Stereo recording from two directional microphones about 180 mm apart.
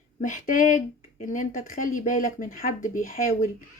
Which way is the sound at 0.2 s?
45° left (ahead or behind).